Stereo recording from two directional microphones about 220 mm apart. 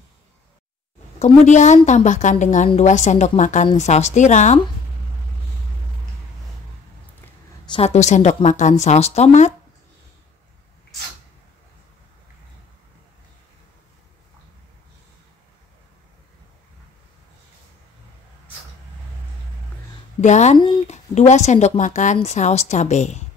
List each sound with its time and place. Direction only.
1.2 s a woman's voice: 30° left (ahead or behind)
7.6 s a woman's voice: 25° left (ahead or behind)
20.2 s a woman's voice: 30° left (ahead or behind)